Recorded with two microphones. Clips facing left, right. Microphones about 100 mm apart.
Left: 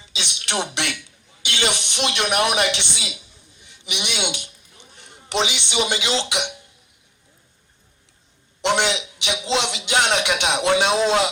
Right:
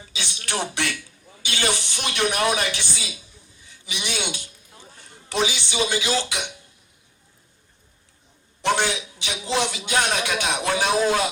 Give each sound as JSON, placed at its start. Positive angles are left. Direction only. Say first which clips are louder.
{"t": 0.0, "sound": "a man's voice", "louder": "left 1 dB", "side_deg": 20}
{"t": 2.7, "sound": "a sound", "louder": "left 2 dB", "side_deg": 20}
{"t": 5.6, "sound": "speech", "louder": "left 1 dB", "side_deg": 20}
{"t": 8.6, "sound": "a man's voice", "louder": "left 2 dB", "side_deg": 20}